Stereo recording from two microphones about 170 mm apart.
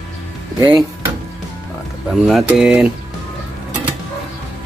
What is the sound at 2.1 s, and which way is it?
Speech, centre (ahead or behind).